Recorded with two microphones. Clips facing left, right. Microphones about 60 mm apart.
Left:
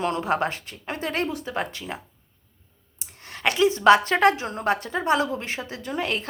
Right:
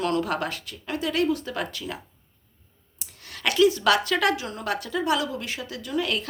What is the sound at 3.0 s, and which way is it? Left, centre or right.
A woman's voice, left.